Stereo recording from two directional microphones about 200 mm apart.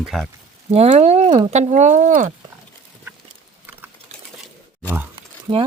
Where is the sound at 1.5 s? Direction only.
35° right (ahead or behind).